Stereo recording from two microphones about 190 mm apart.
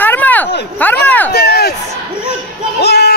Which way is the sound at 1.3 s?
55° left (ahead or behind).